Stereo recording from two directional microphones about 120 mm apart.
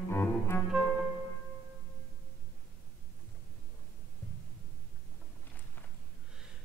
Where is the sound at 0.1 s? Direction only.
20° left (ahead or behind).